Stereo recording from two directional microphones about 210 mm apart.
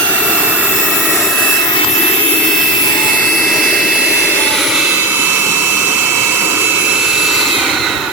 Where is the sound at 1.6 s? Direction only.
25° left (ahead or behind).